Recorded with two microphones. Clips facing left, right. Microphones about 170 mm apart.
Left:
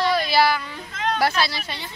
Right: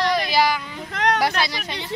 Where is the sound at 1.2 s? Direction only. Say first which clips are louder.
Even; 15° right (ahead or behind).